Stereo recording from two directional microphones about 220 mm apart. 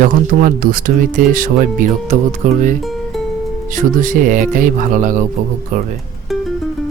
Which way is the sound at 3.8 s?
35° right (ahead or behind).